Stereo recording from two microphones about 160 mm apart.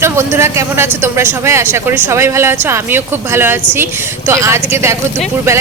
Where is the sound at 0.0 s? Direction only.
15° right (ahead or behind).